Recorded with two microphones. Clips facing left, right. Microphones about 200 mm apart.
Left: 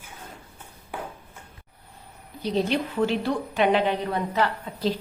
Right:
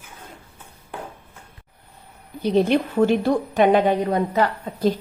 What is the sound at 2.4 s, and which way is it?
A woman's voice, 55° right (ahead or behind).